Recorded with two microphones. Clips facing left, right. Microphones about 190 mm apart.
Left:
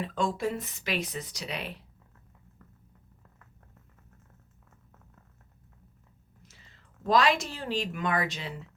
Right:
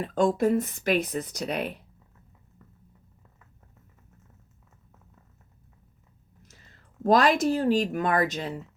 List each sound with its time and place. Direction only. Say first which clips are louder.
0.0 s speech: right 7 dB; 45° right (ahead or behind)
7.0 s speech: right 4 dB; 45° right (ahead or behind)